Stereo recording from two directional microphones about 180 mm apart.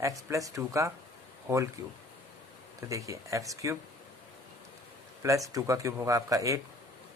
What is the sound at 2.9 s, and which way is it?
Speech, 15° right (ahead or behind).